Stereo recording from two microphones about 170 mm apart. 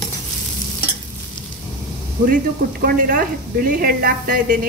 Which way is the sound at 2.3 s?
60° right (ahead or behind).